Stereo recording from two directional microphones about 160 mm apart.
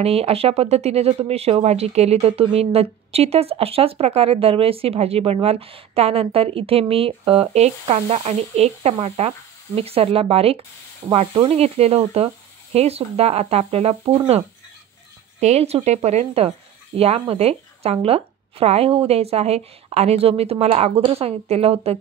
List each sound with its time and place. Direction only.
0.0 s speech: 40° right (ahead or behind)
15.4 s speech: 40° right (ahead or behind)